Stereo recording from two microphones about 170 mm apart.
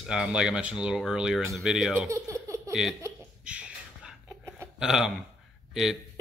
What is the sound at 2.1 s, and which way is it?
Baby laughter, 20° right (ahead or behind).